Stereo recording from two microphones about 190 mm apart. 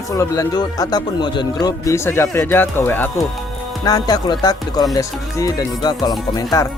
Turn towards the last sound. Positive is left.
turn(degrees=20)  # may be behind; listen again after turning